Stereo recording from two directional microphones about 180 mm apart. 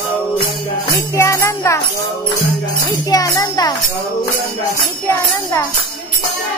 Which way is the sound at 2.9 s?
20° left (ahead or behind).